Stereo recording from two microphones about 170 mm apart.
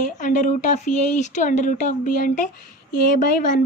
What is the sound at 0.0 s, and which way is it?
Speech, 50° left (ahead or behind).